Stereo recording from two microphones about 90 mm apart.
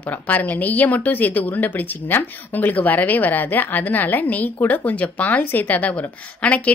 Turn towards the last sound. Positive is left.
turn(degrees=15)  # may be behind; listen again after turning